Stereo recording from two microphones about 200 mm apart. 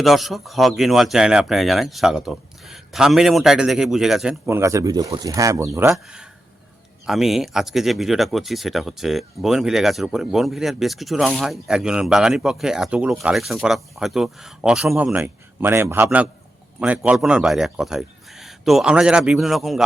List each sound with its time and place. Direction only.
0.0 s speech: centre (ahead or behind)
4.4 s speech: 15° right (ahead or behind)
5.9 s speech: 5° right (ahead or behind)